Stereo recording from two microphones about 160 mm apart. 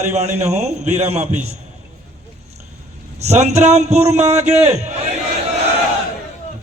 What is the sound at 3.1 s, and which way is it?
A man's voice, 45° right (ahead or behind).